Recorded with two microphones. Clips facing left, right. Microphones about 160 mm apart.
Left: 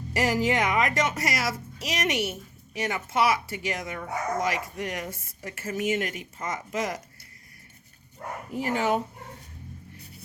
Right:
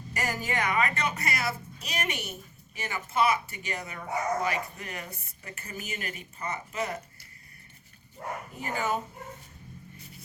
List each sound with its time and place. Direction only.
0.1 s speech: 90° left
8.5 s speech: 90° left